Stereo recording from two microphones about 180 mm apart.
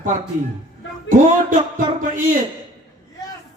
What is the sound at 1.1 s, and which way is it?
Speech, 45° right (ahead or behind).